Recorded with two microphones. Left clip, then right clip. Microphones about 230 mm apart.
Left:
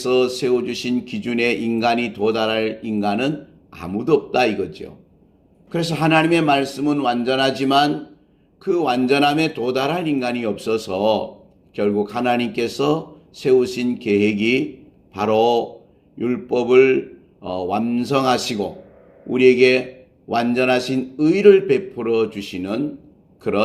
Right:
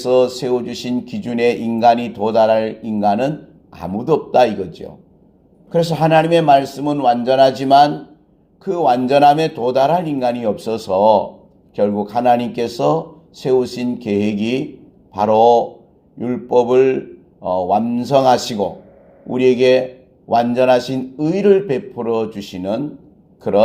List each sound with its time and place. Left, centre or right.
0.1 s speech: right
5.9 s speech: right
19.4 s speech: right